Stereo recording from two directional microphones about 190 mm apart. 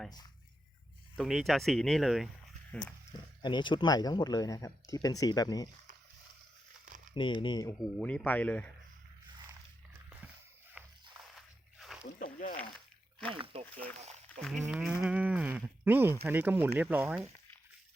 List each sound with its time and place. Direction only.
1.1 s speech: centre (ahead or behind)
3.4 s speech: 25° left (ahead or behind)
7.1 s speech: 25° left (ahead or behind)
7.9 s speech: 5° left (ahead or behind)
10.8 s walk: 5° right (ahead or behind)
12.2 s a sound: 50° left (ahead or behind)
13.3 s speech: 30° right (ahead or behind)
14.3 s speech: 5° left (ahead or behind)
14.7 s moo: 5° right (ahead or behind)
15.8 s speech: 10° right (ahead or behind)